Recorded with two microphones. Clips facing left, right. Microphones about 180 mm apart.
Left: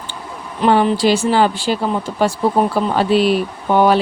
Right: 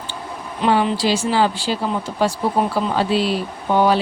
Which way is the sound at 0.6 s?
50° left (ahead or behind).